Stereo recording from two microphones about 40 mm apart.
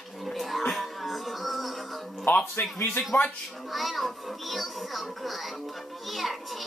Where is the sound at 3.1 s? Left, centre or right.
Left.